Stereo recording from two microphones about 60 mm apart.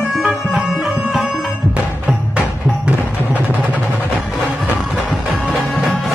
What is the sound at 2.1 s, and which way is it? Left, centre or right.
Music, right.